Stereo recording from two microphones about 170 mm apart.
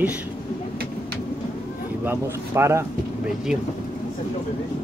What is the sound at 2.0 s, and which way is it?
Speech, 15° right (ahead or behind).